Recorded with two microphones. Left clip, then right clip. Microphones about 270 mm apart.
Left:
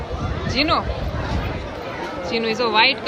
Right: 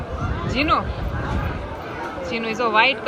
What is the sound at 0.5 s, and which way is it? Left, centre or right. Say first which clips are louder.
Speech: even; centre.